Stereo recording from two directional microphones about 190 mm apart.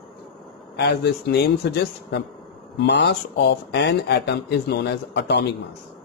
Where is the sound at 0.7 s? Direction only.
60° left (ahead or behind).